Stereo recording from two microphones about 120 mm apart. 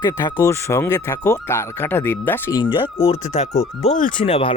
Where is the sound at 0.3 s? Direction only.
25° left (ahead or behind).